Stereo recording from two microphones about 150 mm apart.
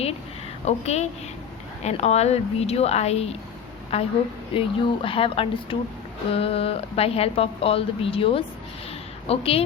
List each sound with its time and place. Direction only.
0.6 s a woman's voice: 45° left (ahead or behind)